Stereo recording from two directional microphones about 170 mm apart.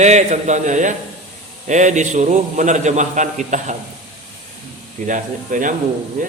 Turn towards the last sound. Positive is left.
turn(degrees=-50)  # may be behind; listen again after turning